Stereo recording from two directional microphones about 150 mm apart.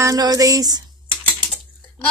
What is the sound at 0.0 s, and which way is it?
Speech, 25° right (ahead or behind).